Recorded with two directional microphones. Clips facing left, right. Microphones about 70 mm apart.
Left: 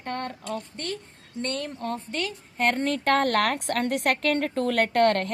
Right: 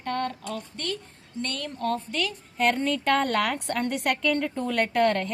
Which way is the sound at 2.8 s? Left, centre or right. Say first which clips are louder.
Left 1 dB; left.